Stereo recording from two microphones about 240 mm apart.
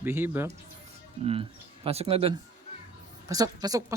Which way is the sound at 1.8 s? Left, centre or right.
Right.